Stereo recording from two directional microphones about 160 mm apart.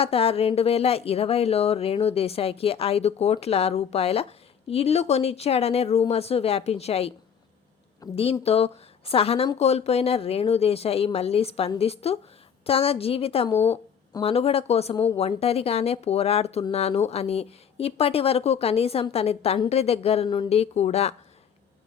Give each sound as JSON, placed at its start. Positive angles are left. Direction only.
{"t": 0.0, "sound": "speech", "side_deg": 40}
{"t": 8.1, "sound": "speech", "side_deg": 35}
{"t": 13.5, "sound": "a sound", "side_deg": 15}
{"t": 14.2, "sound": "speech", "side_deg": 35}